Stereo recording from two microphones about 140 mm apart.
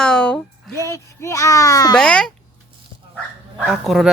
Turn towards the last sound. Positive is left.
turn(degrees=0)  # may be behind; listen again after turning